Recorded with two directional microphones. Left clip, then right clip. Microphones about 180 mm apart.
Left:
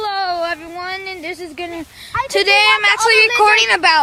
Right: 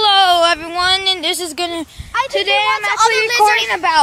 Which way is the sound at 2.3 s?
40° left (ahead or behind).